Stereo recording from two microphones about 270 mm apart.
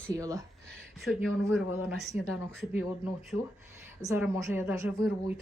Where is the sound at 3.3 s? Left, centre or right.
Left.